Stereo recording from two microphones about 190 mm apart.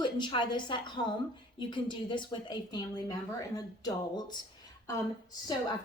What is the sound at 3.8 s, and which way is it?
Speech, 20° left (ahead or behind).